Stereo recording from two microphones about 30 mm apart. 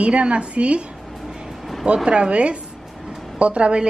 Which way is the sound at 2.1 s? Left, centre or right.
Right.